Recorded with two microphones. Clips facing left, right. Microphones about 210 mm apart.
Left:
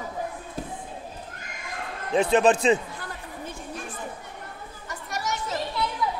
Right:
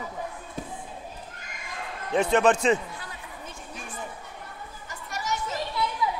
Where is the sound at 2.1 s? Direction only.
35° left (ahead or behind).